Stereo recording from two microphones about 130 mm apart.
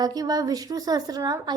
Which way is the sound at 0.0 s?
30° right (ahead or behind).